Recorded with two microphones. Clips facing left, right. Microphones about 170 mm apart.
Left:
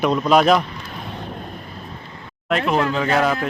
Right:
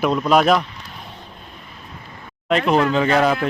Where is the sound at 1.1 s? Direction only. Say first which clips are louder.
Left 9 dB; 75° left (ahead or behind).